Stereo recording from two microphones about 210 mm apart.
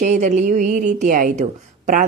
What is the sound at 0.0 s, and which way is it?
Speech, 35° right (ahead or behind).